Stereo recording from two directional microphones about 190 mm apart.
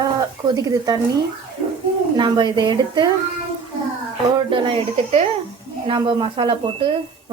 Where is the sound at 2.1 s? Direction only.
25° right (ahead or behind).